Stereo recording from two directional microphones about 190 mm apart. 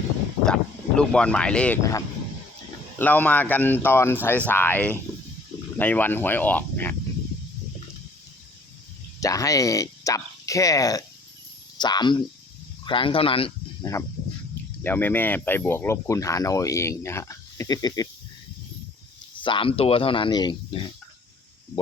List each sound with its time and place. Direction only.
0.4 s speech: 5° left (ahead or behind)
9.2 s speech: 15° left (ahead or behind)
14.8 s speech: 10° left (ahead or behind)
19.4 s speech: 25° left (ahead or behind)